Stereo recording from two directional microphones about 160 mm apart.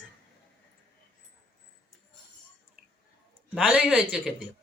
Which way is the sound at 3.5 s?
Centre (ahead or behind).